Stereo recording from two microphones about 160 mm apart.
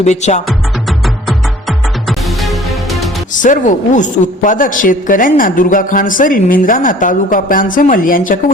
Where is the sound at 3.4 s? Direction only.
55° left (ahead or behind).